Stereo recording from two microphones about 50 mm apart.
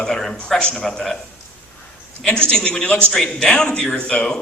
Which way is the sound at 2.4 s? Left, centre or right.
Centre.